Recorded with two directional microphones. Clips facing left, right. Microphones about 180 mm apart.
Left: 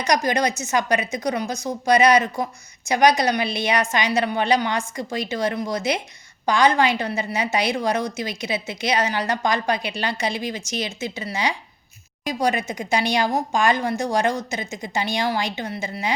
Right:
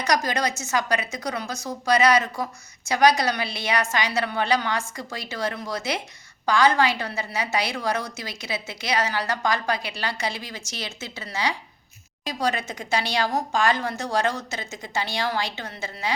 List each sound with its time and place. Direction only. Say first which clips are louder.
0.0 s a woman's voice: left 3 dB; 15° left (ahead or behind)